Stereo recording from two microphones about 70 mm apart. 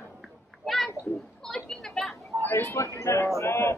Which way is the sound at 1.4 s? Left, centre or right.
Centre.